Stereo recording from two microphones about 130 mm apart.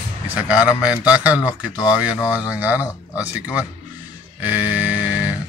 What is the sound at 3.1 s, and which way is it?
Speech, 10° right (ahead or behind).